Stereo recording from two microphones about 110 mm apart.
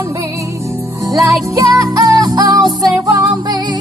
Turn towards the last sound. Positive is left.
turn(degrees=-40)  # may be behind; listen again after turning